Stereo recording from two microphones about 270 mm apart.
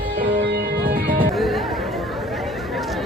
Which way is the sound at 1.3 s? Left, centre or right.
Centre.